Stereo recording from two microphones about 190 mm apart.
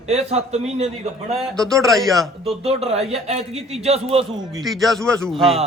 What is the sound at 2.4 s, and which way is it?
A man's voice, 30° right (ahead or behind).